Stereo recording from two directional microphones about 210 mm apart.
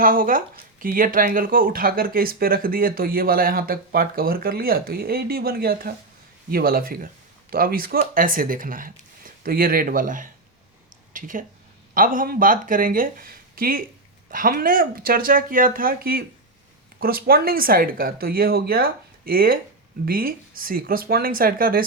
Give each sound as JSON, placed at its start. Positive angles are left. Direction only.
{"t": 0.0, "sound": "speech", "side_deg": -40}